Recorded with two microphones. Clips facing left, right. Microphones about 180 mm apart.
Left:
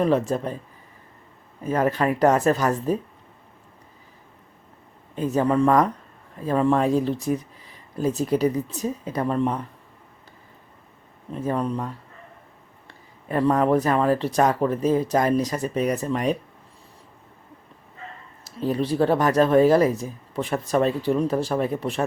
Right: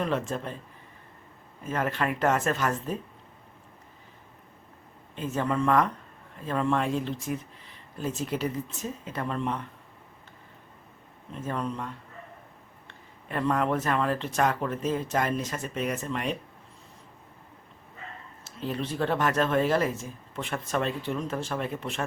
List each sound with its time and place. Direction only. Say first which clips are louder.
0.0 s speech: left 8 dB; 40° left (ahead or behind)
1.6 s speech: left 7 dB; 35° left (ahead or behind)
5.1 s speech: left 7 dB; 40° left (ahead or behind)
11.3 s speech: left 7 dB; 35° left (ahead or behind)
12.9 s speech: left 8 dB; 35° left (ahead or behind)
18.4 s speech: left 8 dB; 40° left (ahead or behind)